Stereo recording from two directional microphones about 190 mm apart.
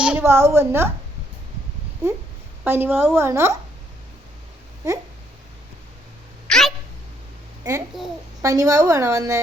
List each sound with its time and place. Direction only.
0.0 s a woman's voice: 10° right (ahead or behind)
2.6 s a woman's voice: 10° right (ahead or behind)
4.8 s a woman's voice: 15° right (ahead or behind)
6.5 s cat: centre (ahead or behind)
7.9 s a child's voice: centre (ahead or behind)
8.4 s a woman's voice: 15° right (ahead or behind)